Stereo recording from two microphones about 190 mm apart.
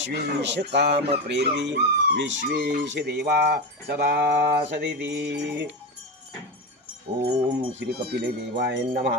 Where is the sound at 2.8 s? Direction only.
65° right (ahead or behind).